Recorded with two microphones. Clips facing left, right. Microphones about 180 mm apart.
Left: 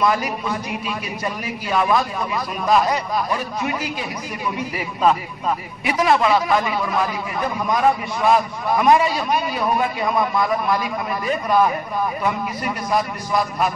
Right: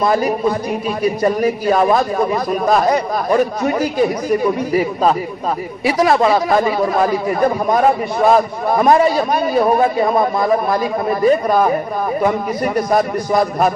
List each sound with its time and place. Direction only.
0.0 s a man's voice: 40° right (ahead or behind)